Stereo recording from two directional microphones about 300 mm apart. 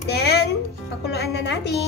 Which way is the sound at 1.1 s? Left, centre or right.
Left.